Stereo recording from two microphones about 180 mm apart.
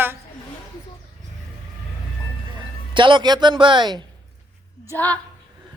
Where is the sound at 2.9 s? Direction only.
25° right (ahead or behind).